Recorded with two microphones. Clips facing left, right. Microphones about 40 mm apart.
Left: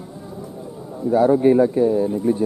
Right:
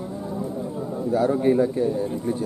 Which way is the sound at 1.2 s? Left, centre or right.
Left.